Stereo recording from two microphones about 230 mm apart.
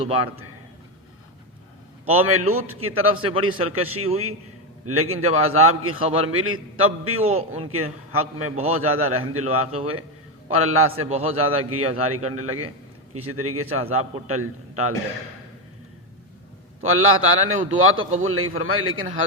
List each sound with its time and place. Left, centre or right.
2.0 s a man's voice: right
16.8 s a man's voice: right